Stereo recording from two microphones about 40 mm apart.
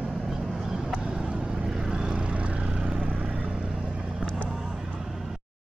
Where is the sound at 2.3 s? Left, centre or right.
Right.